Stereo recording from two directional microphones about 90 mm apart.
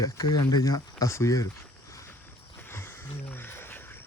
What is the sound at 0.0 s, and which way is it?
Speech, 45° left (ahead or behind).